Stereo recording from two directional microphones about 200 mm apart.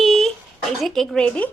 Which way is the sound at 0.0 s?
Centre (ahead or behind).